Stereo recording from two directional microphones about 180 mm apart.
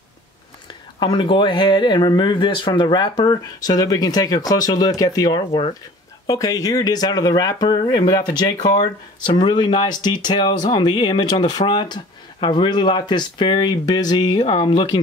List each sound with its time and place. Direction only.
0.9 s speech: 25° left (ahead or behind)